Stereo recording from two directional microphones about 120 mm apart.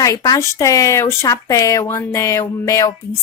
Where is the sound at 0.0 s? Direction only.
30° left (ahead or behind).